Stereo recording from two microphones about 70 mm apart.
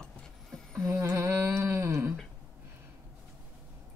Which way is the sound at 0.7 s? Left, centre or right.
Right.